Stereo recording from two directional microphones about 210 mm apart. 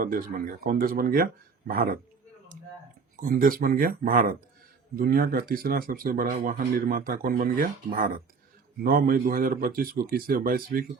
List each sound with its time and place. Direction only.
0.0 s speech: 40° right (ahead or behind)
3.2 s speech: 40° right (ahead or behind)